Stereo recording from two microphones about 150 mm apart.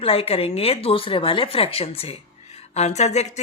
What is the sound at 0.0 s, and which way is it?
Speech, 40° left (ahead or behind).